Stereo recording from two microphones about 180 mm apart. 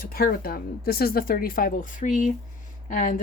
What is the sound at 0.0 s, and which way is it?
A woman's voice, 55° left (ahead or behind).